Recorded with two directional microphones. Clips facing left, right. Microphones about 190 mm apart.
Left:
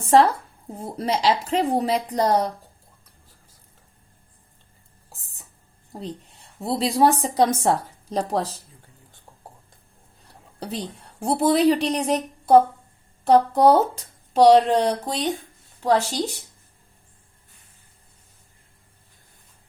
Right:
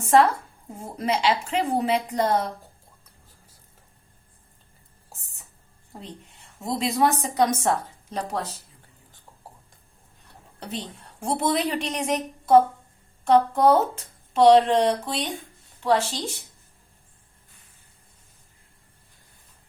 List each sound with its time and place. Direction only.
0.1 s a woman's voice: 35° left (ahead or behind)
6.0 s a woman's voice: 35° left (ahead or behind)
10.6 s a woman's voice: 35° left (ahead or behind)